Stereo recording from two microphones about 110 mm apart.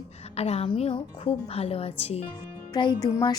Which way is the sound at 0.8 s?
60° left (ahead or behind).